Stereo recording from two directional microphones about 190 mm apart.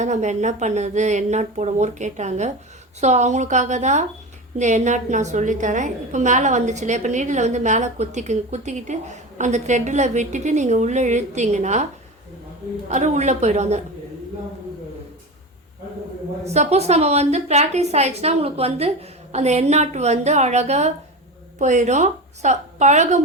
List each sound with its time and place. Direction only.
0.0 s a woman's voice: 40° right (ahead or behind)
12.9 s a woman's voice: 40° right (ahead or behind)
16.4 s a woman's voice: 35° right (ahead or behind)